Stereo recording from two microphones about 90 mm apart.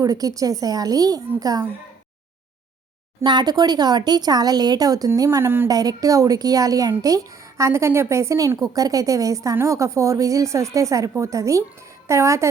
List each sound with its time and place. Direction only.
0.0 s speech: 40° right (ahead or behind)
3.2 s speech: 50° right (ahead or behind)
5.4 s speech: 25° right (ahead or behind)
5.6 s a woman's voice: 45° right (ahead or behind)
7.6 s a woman's voice: 30° right (ahead or behind)